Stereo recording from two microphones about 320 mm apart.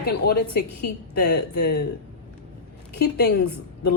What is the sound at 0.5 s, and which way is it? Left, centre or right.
A woman's voice, left.